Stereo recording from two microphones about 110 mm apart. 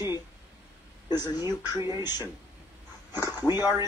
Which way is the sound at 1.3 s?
25° right (ahead or behind).